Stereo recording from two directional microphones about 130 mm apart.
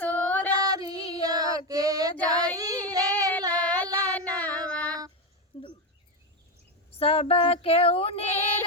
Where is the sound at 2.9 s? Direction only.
30° right (ahead or behind).